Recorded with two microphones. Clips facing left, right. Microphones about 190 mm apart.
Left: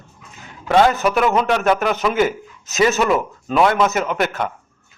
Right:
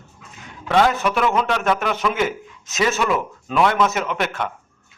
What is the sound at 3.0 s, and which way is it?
Speech, 40° left (ahead or behind).